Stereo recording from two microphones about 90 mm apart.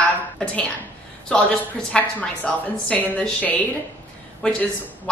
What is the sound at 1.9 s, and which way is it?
Speech, 15° left (ahead or behind).